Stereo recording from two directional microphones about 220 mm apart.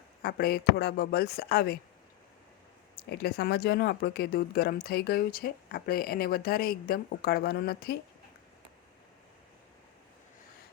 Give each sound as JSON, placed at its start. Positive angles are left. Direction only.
{"t": 0.2, "sound": "speech", "side_deg": 45}
{"t": 3.1, "sound": "speech", "side_deg": 45}